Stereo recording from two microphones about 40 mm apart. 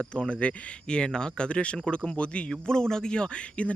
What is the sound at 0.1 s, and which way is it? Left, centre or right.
Speech, left.